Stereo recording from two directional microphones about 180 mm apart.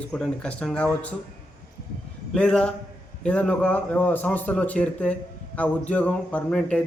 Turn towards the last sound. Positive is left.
turn(degrees=5)  # may be behind; listen again after turning